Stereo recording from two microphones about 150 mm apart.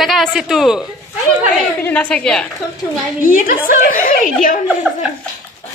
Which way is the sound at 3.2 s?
65° left (ahead or behind).